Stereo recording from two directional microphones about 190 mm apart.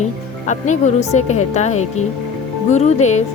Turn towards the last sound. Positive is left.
turn(degrees=40)  # may be behind; listen again after turning